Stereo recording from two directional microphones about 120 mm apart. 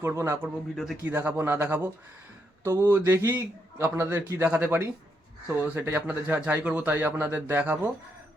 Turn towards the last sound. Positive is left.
turn(degrees=-15)  # may be behind; listen again after turning